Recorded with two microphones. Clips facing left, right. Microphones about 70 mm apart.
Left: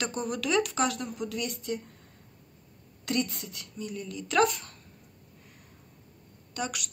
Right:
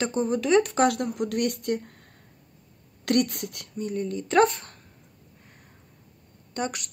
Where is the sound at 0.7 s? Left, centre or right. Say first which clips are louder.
Right 7 dB; right.